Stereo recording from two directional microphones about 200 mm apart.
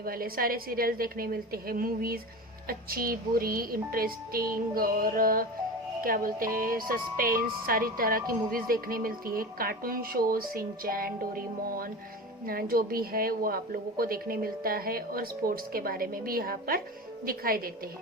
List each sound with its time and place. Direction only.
0.0 s speech: 45° right (ahead or behind)